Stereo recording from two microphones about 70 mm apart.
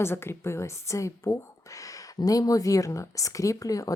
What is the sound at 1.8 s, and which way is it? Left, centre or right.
Speech, left.